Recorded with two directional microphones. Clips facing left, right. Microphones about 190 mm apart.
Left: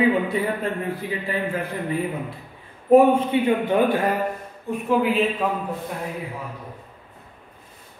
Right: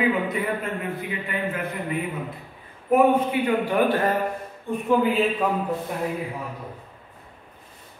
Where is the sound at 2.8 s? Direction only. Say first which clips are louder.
Left 4 dB; 30° left (ahead or behind).